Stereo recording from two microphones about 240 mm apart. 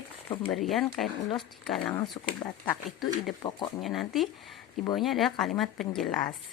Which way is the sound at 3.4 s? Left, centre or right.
Centre.